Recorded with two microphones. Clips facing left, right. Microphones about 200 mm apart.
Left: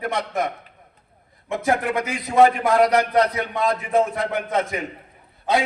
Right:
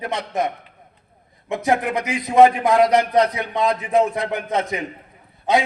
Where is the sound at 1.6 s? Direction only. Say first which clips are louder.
Right 1 dB; 20° right (ahead or behind).